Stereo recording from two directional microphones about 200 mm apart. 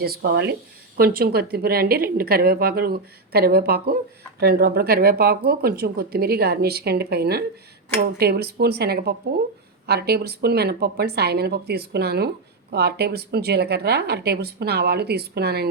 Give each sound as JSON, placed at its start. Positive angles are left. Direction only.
{"t": 0.0, "sound": "speech", "side_deg": -50}